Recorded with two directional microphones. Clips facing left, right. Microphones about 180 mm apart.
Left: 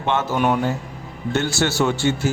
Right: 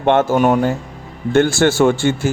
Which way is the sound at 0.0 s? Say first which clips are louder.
Right 7 dB; 50° right (ahead or behind).